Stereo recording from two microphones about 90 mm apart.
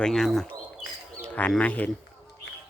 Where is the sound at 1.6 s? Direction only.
15° left (ahead or behind).